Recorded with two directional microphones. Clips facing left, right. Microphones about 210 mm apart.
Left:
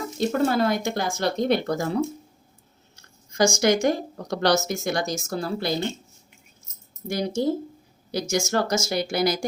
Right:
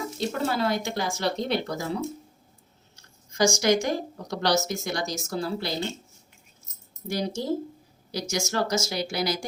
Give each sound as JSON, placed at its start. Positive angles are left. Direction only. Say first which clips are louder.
{"t": 0.2, "sound": "speech", "louder": "left 6 dB", "side_deg": 50}
{"t": 2.9, "sound": "a sound", "louder": "left 5 dB", "side_deg": 55}
{"t": 3.6, "sound": "speech", "louder": "left 3 dB", "side_deg": 55}
{"t": 7.1, "sound": "speech", "louder": "left 4 dB", "side_deg": 50}